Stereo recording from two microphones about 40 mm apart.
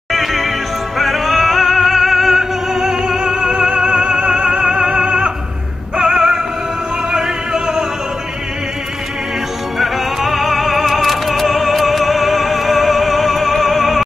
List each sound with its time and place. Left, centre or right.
0.1 s music: centre
7.1 s opera: centre
9.8 s music: centre